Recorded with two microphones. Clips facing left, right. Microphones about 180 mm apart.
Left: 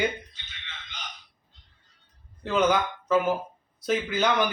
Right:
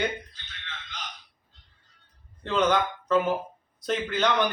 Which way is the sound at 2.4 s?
5° left (ahead or behind).